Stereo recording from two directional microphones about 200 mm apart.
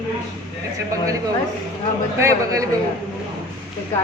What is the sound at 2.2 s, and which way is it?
Speech, 15° right (ahead or behind).